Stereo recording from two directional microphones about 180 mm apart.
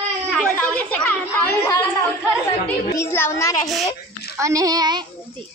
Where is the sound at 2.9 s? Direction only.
15° left (ahead or behind).